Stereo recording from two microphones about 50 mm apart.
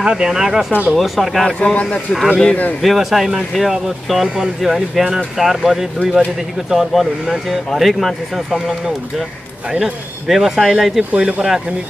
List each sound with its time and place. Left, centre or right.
0.0 s speech: centre
1.6 s speech: left
2.8 s speech: centre
11.1 s speech: centre